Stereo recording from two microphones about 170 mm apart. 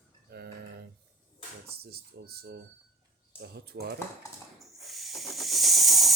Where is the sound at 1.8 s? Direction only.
65° right (ahead or behind).